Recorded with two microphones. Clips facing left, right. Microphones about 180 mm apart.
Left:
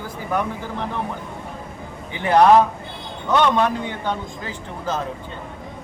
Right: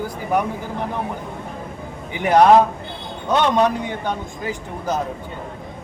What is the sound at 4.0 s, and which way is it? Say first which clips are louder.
A man's voice: right 1 dB; 15° right (ahead or behind).